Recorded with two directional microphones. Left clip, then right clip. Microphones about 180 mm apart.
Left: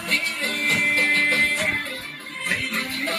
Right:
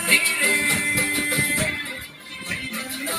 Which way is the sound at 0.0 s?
60° right (ahead or behind).